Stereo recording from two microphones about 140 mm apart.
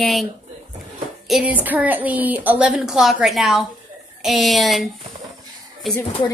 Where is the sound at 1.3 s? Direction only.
10° right (ahead or behind).